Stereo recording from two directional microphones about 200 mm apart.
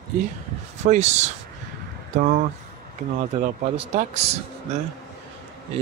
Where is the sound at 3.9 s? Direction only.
35° right (ahead or behind).